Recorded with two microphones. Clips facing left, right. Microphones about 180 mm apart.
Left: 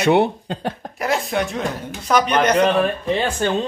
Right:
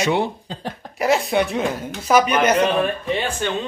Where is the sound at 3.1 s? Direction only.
40° left (ahead or behind).